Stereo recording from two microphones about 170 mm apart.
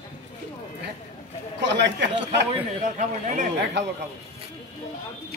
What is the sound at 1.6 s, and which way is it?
Speech, 90° right.